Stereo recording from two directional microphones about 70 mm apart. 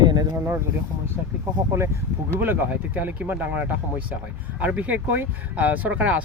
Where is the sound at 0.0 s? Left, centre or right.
Right.